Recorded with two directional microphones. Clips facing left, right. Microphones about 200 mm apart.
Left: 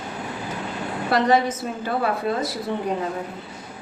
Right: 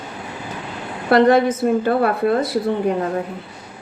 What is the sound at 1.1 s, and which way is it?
A woman's voice, 55° right (ahead or behind).